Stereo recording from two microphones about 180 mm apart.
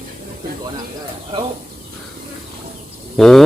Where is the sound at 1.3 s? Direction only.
30° right (ahead or behind).